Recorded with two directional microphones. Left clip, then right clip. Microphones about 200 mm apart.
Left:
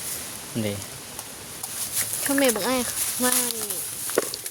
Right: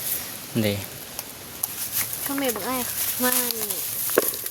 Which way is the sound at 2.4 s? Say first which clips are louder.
Left 3 dB; 60° left (ahead or behind).